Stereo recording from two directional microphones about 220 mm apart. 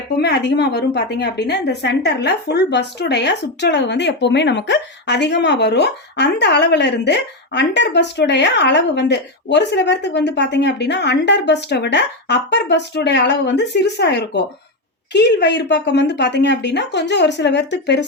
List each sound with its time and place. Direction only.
0.2 s a woman's voice: 50° left (ahead or behind)